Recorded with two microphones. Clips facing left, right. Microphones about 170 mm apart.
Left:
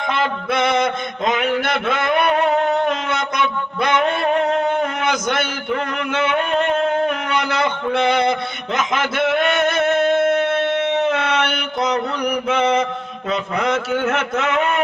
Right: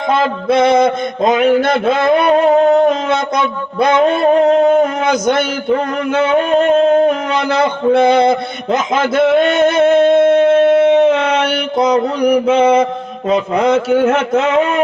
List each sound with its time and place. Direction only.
0.2 s mantra: 30° right (ahead or behind)
3.1 s a sound: 25° right (ahead or behind)
13.3 s mantra: 35° right (ahead or behind)